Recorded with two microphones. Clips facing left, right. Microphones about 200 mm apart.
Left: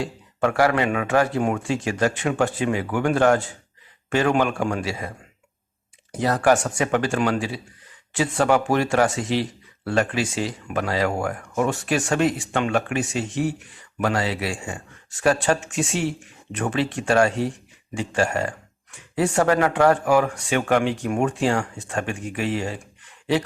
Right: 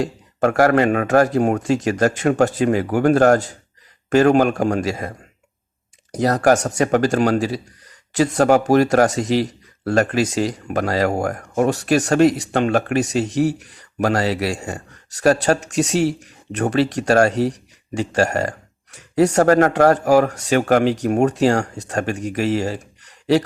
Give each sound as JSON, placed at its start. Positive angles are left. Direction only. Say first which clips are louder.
{"t": 0.0, "sound": "speech", "louder": "right 4 dB", "side_deg": -40}